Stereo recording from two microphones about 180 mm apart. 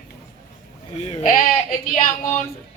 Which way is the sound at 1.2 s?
45° left (ahead or behind).